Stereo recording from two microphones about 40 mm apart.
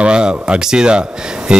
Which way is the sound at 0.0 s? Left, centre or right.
Right.